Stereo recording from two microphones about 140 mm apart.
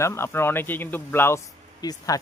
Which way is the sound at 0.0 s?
20° left (ahead or behind).